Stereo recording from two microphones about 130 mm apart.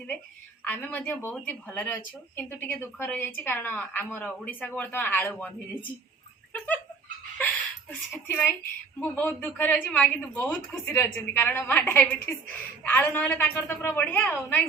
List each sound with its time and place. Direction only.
0.6 s speech: 15° left (ahead or behind)
7.3 s a sound: 10° left (ahead or behind)
9.0 s speech: 15° left (ahead or behind)